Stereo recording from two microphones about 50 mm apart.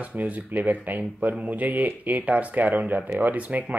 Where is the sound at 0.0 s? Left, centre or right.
Right.